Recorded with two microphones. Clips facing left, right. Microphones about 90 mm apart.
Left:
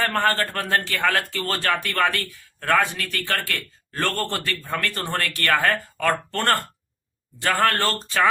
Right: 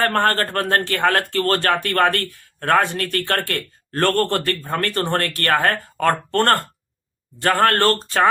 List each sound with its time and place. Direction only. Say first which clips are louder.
0.0 s speech: right 3 dB; 50° right (ahead or behind)
2.8 s speech: right 5 dB; 55° right (ahead or behind)